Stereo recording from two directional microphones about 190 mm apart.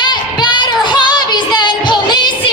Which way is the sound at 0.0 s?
25° left (ahead or behind).